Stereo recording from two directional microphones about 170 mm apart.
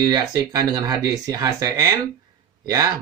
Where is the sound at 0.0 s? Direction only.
20° right (ahead or behind).